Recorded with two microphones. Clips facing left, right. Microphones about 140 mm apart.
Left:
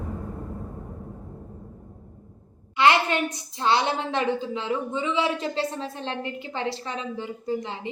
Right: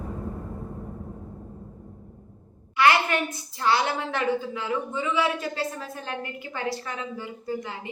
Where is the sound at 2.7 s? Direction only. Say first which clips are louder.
Left 1 dB; 25° left (ahead or behind).